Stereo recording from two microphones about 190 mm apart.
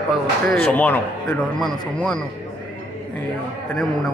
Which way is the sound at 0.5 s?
5° left (ahead or behind).